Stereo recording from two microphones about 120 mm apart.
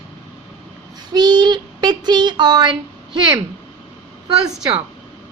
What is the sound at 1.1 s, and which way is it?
Speech, 35° right (ahead or behind).